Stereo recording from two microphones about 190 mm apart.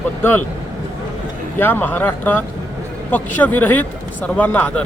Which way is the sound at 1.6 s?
10° left (ahead or behind).